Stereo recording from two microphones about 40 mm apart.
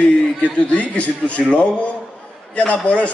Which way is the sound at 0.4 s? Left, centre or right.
Left.